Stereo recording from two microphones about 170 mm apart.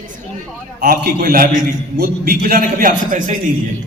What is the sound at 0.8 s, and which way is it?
A man's voice, 60° right (ahead or behind).